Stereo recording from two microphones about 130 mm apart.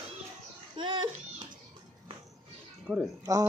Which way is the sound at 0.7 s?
40° right (ahead or behind).